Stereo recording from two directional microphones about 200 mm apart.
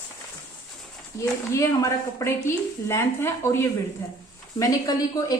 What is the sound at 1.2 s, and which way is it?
A woman's voice, 15° left (ahead or behind).